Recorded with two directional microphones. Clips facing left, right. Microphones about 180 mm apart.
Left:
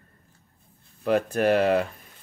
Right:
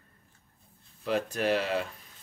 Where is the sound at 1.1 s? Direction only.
55° left (ahead or behind).